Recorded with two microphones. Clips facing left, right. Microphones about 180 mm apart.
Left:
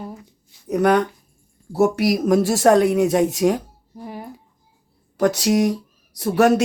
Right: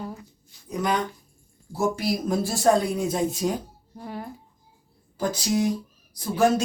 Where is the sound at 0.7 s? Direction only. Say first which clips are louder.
Left 9 dB; 65° left (ahead or behind).